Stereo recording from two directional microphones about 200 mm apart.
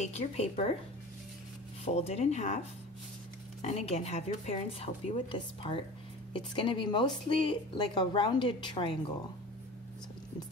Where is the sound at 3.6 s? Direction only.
30° left (ahead or behind).